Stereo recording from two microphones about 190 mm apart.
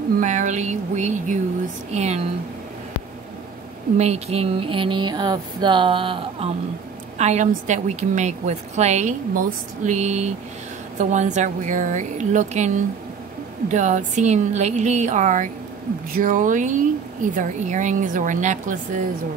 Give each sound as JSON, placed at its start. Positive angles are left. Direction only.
{"t": 0.2, "sound": "a woman's voice", "side_deg": -40}
{"t": 4.0, "sound": "a sound", "side_deg": -35}
{"t": 7.2, "sound": "a woman's voice", "side_deg": -35}